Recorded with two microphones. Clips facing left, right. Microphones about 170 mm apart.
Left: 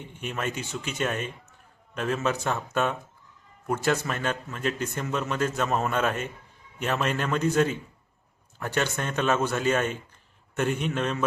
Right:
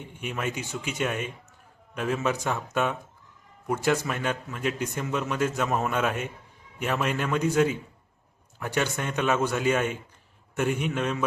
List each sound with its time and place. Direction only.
0.1 s a man's voice: 10° right (ahead or behind)